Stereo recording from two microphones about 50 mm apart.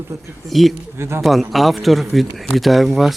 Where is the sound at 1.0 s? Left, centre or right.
Right.